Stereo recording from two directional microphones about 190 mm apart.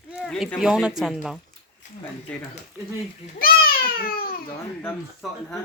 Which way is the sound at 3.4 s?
50° left (ahead or behind).